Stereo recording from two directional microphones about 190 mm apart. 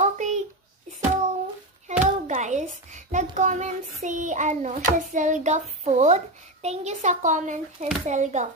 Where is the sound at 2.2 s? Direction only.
40° right (ahead or behind).